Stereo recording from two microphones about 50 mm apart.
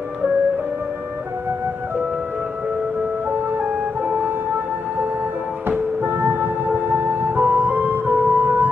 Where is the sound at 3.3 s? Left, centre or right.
Right.